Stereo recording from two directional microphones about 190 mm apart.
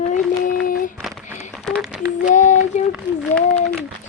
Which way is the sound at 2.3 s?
40° left (ahead or behind).